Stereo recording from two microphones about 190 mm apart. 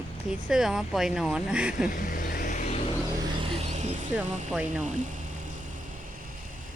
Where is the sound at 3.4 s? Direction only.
30° right (ahead or behind).